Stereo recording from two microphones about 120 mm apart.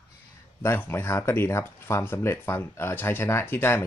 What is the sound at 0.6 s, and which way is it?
Speech, 20° left (ahead or behind).